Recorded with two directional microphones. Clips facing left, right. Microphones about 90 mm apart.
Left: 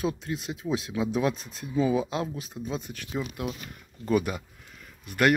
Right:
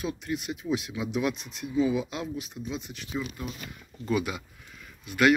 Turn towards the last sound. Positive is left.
turn(degrees=50)  # may be behind; listen again after turning